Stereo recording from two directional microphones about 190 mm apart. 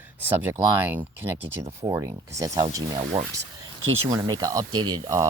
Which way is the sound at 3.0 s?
35° right (ahead or behind).